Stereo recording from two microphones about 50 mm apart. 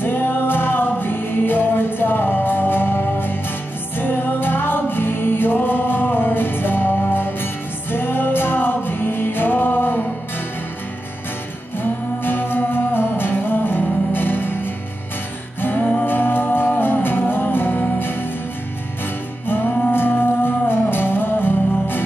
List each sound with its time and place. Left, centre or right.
0.0 s music: left
11.8 s music: left
19.4 s music: left